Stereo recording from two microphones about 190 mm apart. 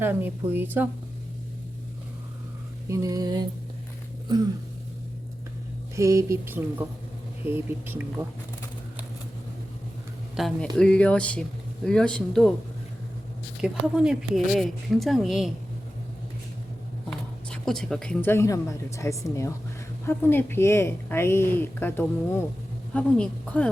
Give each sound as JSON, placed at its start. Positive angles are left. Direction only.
{"t": 0.0, "sound": "speech", "side_deg": -10}
{"t": 2.9, "sound": "a sound", "side_deg": -20}
{"t": 6.0, "sound": "speech", "side_deg": -15}
{"t": 10.3, "sound": "a woman's voice", "side_deg": 0}
{"t": 13.6, "sound": "speech", "side_deg": -5}
{"t": 17.1, "sound": "a woman's voice", "side_deg": 5}